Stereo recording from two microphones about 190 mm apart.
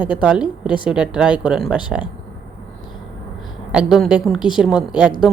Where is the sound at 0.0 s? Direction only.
5° right (ahead or behind).